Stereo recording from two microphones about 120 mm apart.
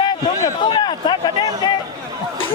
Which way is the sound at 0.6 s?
40° left (ahead or behind).